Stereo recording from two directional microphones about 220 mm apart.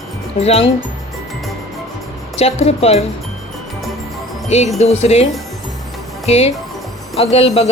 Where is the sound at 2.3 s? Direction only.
30° left (ahead or behind).